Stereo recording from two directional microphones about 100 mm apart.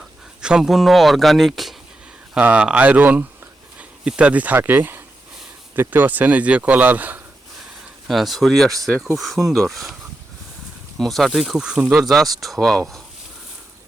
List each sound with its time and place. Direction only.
0.4 s speech: 5° right (ahead or behind)
2.3 s speech: 10° right (ahead or behind)
8.0 s speech: centre (ahead or behind)
10.9 s speech: centre (ahead or behind)